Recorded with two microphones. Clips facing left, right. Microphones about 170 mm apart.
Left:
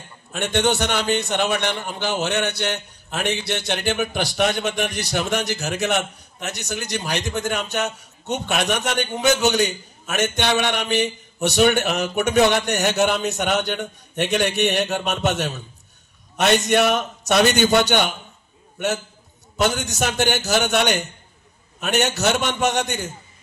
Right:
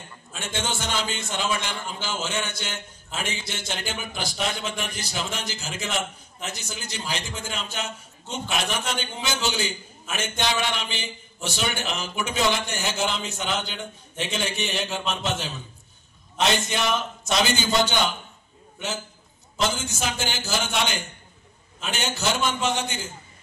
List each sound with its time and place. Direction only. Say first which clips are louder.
0.3 s a man's voice: left 10 dB; 70° left (ahead or behind)
19.6 s a man's voice: left 5 dB; 70° left (ahead or behind)